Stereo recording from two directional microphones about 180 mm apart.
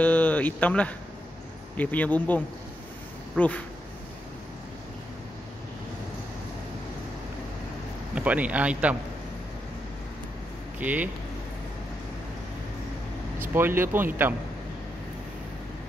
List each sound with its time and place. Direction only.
0.0 s speech: 10° left (ahead or behind)
8.1 s a man's voice: 5° right (ahead or behind)
10.8 s speech: 10° right (ahead or behind)
13.4 s speech: 15° right (ahead or behind)